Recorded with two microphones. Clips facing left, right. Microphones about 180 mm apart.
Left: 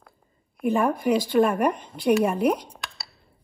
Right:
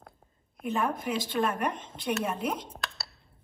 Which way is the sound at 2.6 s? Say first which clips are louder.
Right 1 dB; centre (ahead or behind).